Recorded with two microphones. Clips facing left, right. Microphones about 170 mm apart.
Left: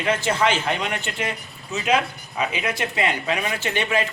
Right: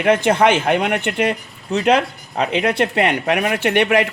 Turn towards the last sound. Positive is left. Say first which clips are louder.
# right 8 dB
turn(degrees=-65)  # may be behind; listen again after turning